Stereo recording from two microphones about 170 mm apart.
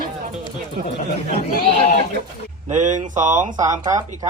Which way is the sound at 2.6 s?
45° right (ahead or behind).